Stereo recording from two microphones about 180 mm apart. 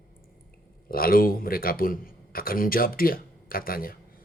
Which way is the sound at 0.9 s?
55° left (ahead or behind).